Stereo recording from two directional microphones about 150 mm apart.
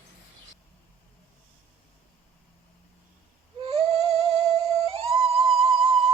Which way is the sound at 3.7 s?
40° right (ahead or behind).